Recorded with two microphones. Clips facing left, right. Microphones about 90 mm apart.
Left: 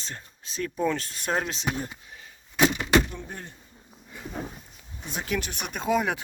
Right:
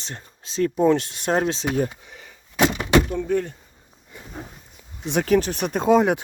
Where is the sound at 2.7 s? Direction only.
85° right.